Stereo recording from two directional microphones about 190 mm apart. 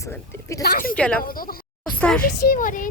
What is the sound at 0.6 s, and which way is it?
Speech, 50° left (ahead or behind).